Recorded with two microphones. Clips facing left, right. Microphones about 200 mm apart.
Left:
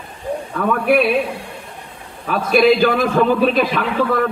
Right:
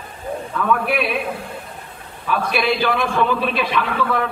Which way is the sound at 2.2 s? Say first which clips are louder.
Left 7 dB; 40° left (ahead or behind).